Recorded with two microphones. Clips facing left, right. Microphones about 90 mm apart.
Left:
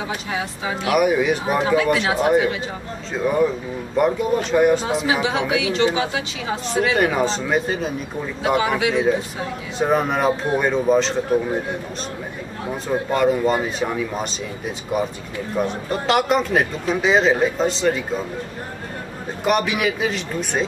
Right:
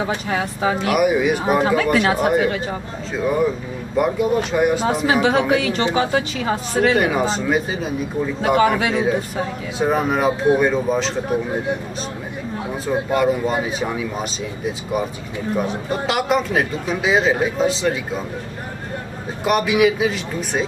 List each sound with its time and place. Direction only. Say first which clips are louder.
0.3 s a woman's voice: right 6 dB; 45° right (ahead or behind)
0.9 s speech: left 2 dB; 5° right (ahead or behind)
1.8 s a woman's voice: right 1 dB; 45° right (ahead or behind)
3.9 s speech: right 1 dB; 5° right (ahead or behind)
4.8 s a woman's voice: right 3 dB; 40° right (ahead or behind)
7.0 s speech: even; centre (ahead or behind)
8.5 s a woman's voice: right 4 dB; 45° right (ahead or behind)
9.8 s speech: even; centre (ahead or behind)
12.8 s speech: even; 5° right (ahead or behind)
19.4 s speech: right 4 dB; centre (ahead or behind)